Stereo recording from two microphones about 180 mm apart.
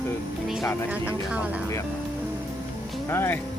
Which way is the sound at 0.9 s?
10° right (ahead or behind).